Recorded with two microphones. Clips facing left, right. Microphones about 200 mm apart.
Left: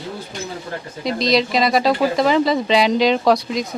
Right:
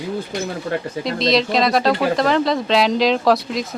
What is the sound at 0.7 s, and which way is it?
Speech, 70° right (ahead or behind).